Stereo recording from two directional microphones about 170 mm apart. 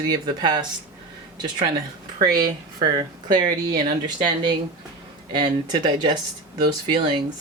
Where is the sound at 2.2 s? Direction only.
25° right (ahead or behind).